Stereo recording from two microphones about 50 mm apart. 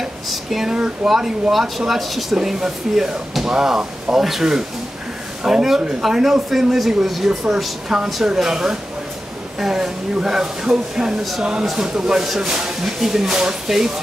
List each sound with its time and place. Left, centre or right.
0.0 s speech: centre
0.7 s speech: centre
1.5 s speech: centre